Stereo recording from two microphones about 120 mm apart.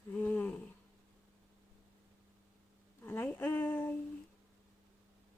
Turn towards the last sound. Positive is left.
turn(degrees=15)  # may be behind; listen again after turning